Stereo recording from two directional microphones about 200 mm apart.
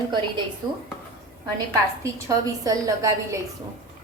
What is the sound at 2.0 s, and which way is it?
A woman's voice, 15° right (ahead or behind).